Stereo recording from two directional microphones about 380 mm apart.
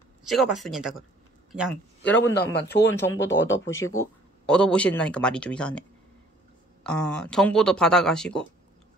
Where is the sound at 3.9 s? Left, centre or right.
Centre.